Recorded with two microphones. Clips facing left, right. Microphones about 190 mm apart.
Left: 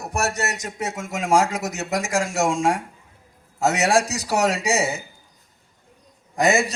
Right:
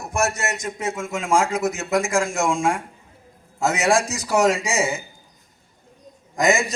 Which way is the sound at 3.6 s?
40° left (ahead or behind).